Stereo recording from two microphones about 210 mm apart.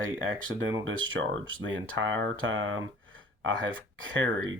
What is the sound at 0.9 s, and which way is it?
Speech, 70° right (ahead or behind).